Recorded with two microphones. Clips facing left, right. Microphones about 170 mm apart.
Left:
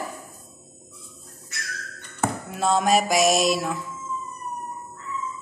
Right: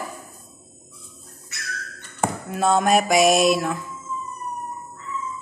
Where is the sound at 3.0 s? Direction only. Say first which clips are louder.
Right 3 dB; 60° right (ahead or behind).